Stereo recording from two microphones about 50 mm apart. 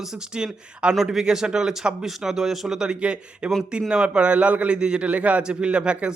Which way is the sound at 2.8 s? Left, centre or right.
Right.